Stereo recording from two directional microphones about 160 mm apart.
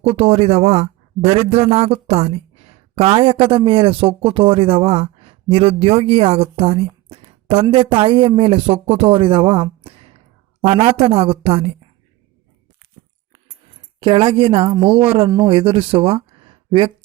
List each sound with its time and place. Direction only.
0.2 s a man's voice: 40° right (ahead or behind)
9.8 s a sound: 35° right (ahead or behind)
10.6 s a man's voice: 35° right (ahead or behind)
14.0 s a man's voice: 30° right (ahead or behind)